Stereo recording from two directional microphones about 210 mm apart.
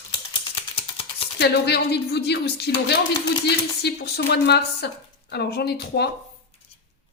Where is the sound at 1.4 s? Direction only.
50° left (ahead or behind).